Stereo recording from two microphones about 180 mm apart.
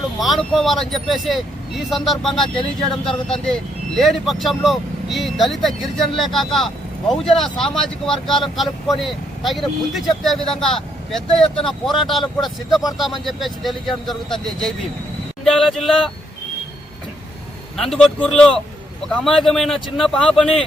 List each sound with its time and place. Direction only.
0.2 s a man's voice: centre (ahead or behind)
17.7 s a man's voice: centre (ahead or behind)